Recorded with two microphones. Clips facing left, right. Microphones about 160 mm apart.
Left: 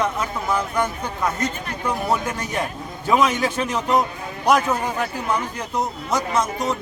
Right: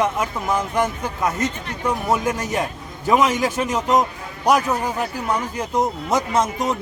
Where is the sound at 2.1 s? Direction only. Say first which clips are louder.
Right 2 dB; 5° right (ahead or behind).